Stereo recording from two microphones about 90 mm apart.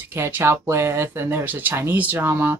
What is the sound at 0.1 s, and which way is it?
Speech, 25° right (ahead or behind).